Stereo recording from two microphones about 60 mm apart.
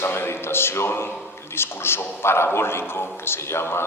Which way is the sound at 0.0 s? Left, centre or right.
Left.